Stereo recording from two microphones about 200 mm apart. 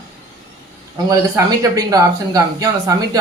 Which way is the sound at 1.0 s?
15° right (ahead or behind).